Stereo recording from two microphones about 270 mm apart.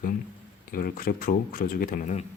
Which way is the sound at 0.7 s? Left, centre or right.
Left.